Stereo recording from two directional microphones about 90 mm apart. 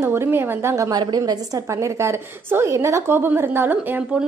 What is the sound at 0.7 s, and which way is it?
Speech, 40° right (ahead or behind).